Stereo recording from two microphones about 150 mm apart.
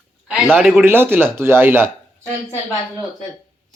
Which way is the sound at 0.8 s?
15° right (ahead or behind).